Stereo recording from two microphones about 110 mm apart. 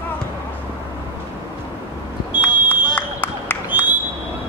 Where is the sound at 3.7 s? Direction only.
15° right (ahead or behind).